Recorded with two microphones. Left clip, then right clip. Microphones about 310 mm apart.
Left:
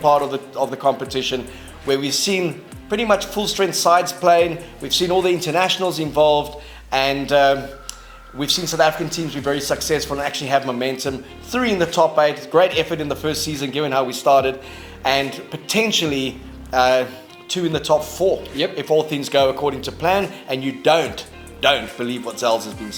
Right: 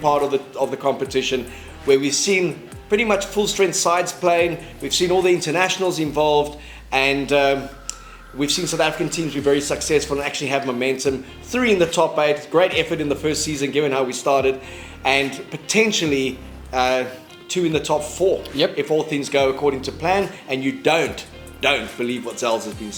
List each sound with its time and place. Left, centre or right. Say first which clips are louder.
0.0 s speech: left 2 dB; left